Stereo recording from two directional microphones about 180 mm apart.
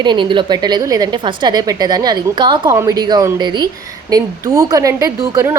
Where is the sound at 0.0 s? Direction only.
25° right (ahead or behind).